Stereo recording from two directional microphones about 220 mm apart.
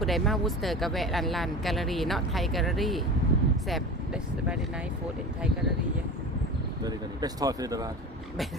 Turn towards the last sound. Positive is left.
turn(degrees=-15)  # may be behind; listen again after turning